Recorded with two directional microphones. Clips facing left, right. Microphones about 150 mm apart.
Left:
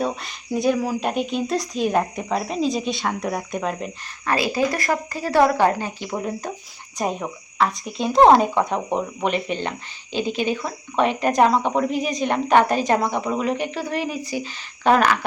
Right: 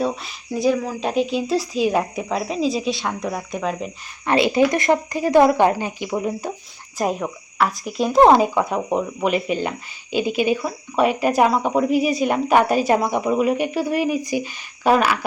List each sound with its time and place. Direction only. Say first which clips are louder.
0.0 s speech: right 2 dB; centre (ahead or behind)
4.3 s speech: right 5 dB; 20° right (ahead or behind); by 15.2 s 5° right (ahead or behind)